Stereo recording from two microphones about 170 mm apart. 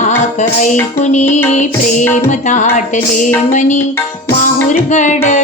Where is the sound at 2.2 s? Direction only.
45° left (ahead or behind).